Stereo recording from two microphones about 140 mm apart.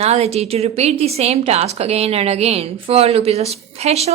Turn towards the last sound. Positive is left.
turn(degrees=-50)  # may be behind; listen again after turning